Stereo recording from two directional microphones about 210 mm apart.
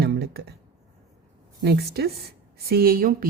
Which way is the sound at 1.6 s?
50° right (ahead or behind).